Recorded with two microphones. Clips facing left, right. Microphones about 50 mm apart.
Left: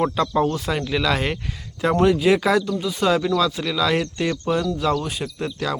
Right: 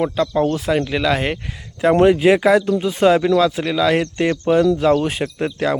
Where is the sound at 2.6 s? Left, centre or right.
Right.